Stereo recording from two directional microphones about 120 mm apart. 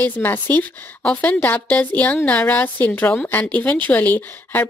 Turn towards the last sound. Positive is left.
turn(degrees=15)  # may be behind; listen again after turning